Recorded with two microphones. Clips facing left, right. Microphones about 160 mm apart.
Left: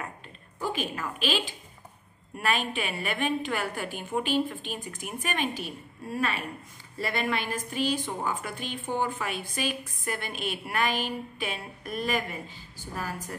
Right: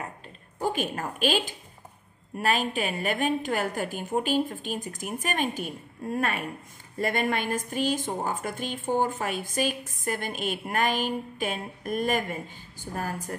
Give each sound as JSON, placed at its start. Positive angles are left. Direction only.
{"t": 0.6, "sound": "a woman's voice", "side_deg": -50}